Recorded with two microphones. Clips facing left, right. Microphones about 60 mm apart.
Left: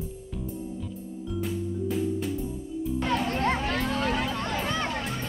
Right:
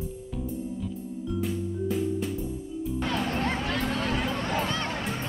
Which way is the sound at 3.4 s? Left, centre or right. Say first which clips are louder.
Left 2 dB; left.